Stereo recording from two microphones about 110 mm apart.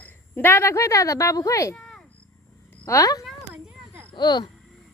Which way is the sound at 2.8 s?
30° left (ahead or behind).